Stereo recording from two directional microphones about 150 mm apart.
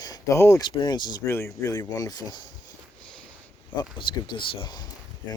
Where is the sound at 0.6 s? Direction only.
30° left (ahead or behind).